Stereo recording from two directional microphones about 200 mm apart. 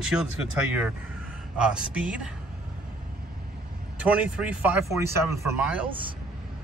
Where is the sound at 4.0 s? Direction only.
5° right (ahead or behind).